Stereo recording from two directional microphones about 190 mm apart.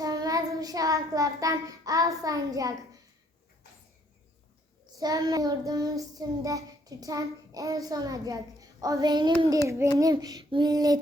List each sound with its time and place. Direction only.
0.0 s child singing: 20° right (ahead or behind)
4.9 s child singing: 20° right (ahead or behind)
9.6 s a child's voice: 15° right (ahead or behind)
10.0 s child singing: 20° right (ahead or behind)